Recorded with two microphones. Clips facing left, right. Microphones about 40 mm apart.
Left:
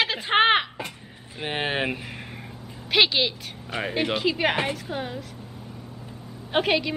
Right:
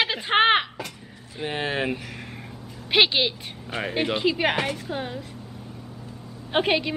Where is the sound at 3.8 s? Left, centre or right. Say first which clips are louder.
Even; centre.